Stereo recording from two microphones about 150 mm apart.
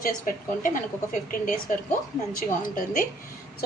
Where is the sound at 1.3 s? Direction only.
65° left (ahead or behind).